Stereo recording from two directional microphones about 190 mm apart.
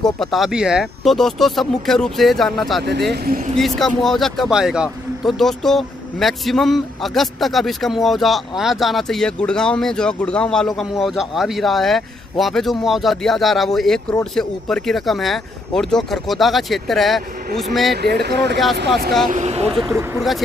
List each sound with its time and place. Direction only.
0.0 s speech: centre (ahead or behind)
3.3 s speech: 45° right (ahead or behind)
3.5 s speech: centre (ahead or behind)
17.9 s speech: 60° right (ahead or behind)
19.3 s speech: 35° right (ahead or behind)
19.9 s speech: 15° right (ahead or behind)
20.2 s speech: centre (ahead or behind)